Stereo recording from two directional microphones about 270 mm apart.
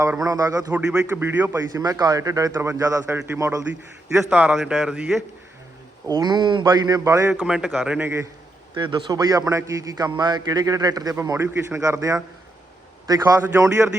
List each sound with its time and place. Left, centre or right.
0.0 s a man's voice: centre
6.1 s a man's voice: centre